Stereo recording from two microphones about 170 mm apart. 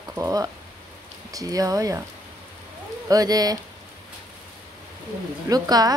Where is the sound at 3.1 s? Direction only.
20° right (ahead or behind).